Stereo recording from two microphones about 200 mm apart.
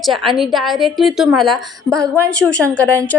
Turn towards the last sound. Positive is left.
turn(degrees=10)  # may be behind; listen again after turning